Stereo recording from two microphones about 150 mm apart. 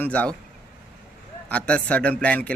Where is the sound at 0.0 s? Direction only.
10° left (ahead or behind).